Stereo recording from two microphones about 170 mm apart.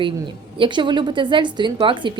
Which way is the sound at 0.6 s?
30° right (ahead or behind).